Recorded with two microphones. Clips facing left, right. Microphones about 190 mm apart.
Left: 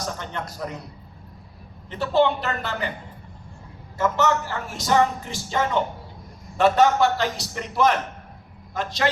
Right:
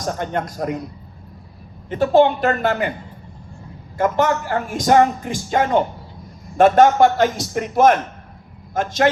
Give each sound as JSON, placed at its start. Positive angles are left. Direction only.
{"t": 0.0, "sound": "a woman's voice", "side_deg": -50}
{"t": 1.9, "sound": "a woman's voice", "side_deg": -50}
{"t": 3.9, "sound": "a woman's voice", "side_deg": -50}